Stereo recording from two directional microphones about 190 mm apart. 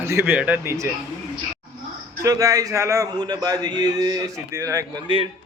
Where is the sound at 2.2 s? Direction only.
15° right (ahead or behind).